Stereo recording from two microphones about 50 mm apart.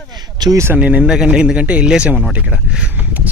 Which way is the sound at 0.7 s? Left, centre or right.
Right.